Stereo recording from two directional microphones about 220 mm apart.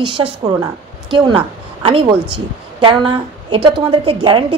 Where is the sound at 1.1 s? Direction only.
20° right (ahead or behind).